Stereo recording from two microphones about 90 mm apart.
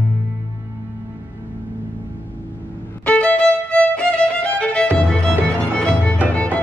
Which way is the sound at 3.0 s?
15° left (ahead or behind).